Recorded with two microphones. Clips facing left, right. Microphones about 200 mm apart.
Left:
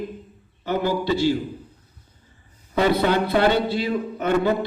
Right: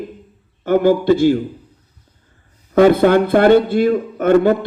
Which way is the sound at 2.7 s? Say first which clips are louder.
Right 9 dB; 50° right (ahead or behind).